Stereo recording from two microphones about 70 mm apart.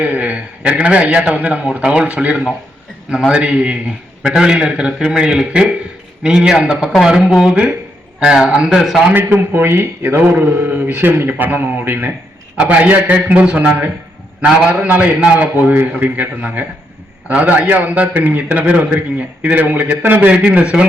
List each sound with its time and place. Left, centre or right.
0.0 s a man's voice: right; by 9.1 s centre
9.1 s a man's voice: right; by 14.7 s centre
14.7 s speech: right